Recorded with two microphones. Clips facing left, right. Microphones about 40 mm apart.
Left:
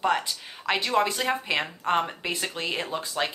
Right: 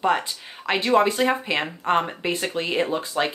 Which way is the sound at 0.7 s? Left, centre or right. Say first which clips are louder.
Right 5 dB; centre.